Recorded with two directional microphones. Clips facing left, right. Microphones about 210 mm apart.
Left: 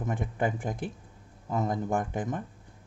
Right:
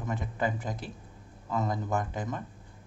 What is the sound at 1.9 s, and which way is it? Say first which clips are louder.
Speech: left 2 dB; 50° left (ahead or behind).